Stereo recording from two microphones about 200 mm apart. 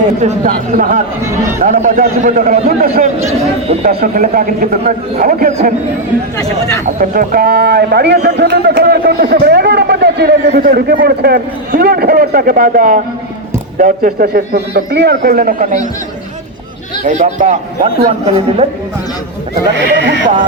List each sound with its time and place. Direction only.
0.2 s a man's voice: 40° right (ahead or behind)
3.8 s a man's voice: 45° right (ahead or behind)
6.8 s a man's voice: 45° right (ahead or behind)
17.0 s a man's voice: 35° right (ahead or behind)
19.7 s speech: 60° right (ahead or behind)